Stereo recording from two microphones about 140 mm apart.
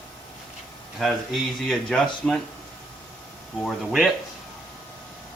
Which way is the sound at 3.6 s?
Centre (ahead or behind).